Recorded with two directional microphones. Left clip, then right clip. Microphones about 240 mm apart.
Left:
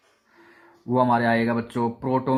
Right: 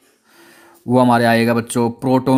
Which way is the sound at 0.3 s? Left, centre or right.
Right.